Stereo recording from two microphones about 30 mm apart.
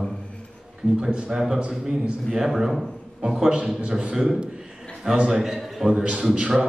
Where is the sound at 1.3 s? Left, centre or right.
Right.